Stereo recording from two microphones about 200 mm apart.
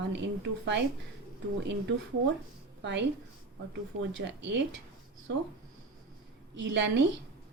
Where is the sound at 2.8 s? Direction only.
60° right (ahead or behind).